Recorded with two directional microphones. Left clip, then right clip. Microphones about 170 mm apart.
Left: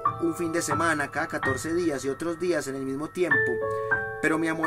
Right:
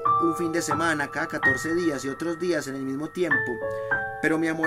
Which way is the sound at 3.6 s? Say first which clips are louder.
Even; 30° left (ahead or behind).